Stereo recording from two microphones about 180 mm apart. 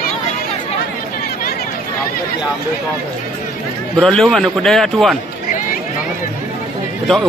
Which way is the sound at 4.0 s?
5° left (ahead or behind).